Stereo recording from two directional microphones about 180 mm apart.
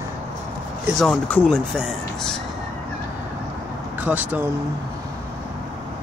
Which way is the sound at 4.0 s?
10° right (ahead or behind).